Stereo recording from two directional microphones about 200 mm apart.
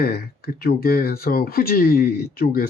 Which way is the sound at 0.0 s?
50° left (ahead or behind).